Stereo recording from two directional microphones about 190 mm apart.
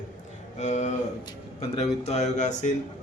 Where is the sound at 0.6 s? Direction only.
40° left (ahead or behind).